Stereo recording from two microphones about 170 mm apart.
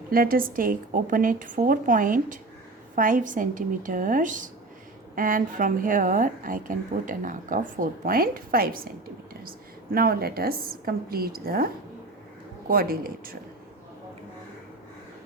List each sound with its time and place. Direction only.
0.1 s a woman's voice: 60° right (ahead or behind)